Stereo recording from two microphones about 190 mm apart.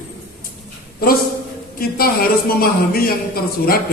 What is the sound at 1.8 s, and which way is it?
A man's voice, 50° left (ahead or behind).